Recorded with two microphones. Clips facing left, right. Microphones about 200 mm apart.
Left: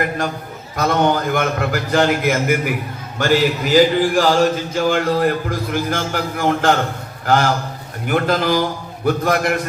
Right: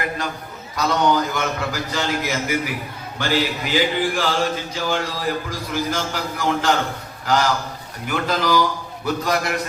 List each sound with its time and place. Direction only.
0.8 s a man's voice: 55° left (ahead or behind)